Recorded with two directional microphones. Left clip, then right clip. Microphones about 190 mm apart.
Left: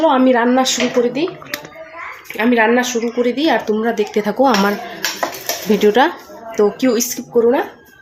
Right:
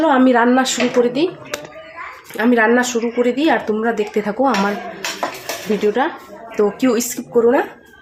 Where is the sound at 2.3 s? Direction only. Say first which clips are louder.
Even; 10° right (ahead or behind).